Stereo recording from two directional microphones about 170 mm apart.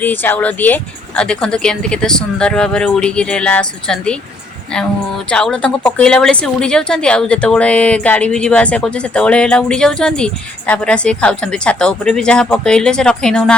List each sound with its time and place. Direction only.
0.0 s speech: 10° left (ahead or behind)
5.3 s speech: 5° left (ahead or behind)